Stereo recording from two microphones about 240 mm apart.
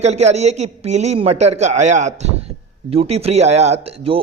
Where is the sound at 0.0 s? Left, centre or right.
Right.